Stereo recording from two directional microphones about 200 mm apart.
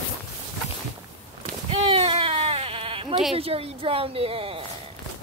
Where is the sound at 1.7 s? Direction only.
30° right (ahead or behind).